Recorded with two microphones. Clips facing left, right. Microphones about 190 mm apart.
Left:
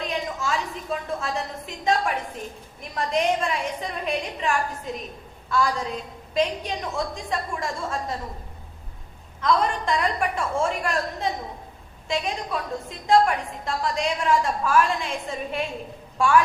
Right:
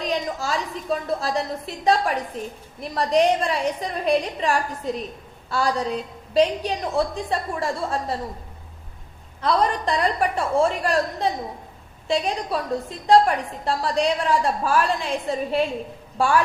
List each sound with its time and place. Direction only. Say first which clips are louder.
0.0 s a woman's voice: right 3 dB; 35° right (ahead or behind)
9.4 s a woman's voice: right 1 dB; 35° right (ahead or behind)